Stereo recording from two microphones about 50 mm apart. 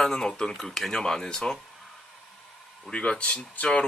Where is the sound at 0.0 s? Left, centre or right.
Centre.